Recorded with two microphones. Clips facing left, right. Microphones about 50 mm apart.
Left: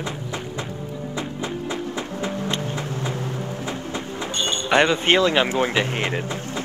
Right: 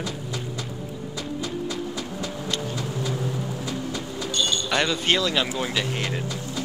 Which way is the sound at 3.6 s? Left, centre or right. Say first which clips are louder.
Left 1 dB; left.